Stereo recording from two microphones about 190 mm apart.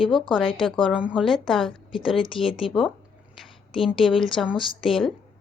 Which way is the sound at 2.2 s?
25° left (ahead or behind).